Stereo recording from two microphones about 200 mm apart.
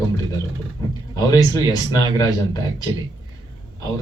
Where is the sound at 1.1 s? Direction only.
20° left (ahead or behind).